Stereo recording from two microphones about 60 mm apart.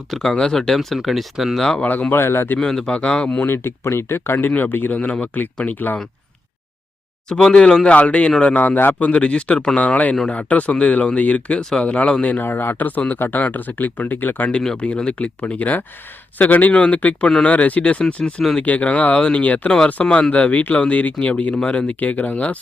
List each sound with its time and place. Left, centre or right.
0.2 s speech: centre
1.6 s speech: centre
1.9 s speech: left
2.2 s speech: left
2.6 s speech: centre
3.2 s speech: left
7.3 s speech: centre
7.9 s speech: left
12.4 s speech: left
14.6 s speech: centre; by 22.5 s left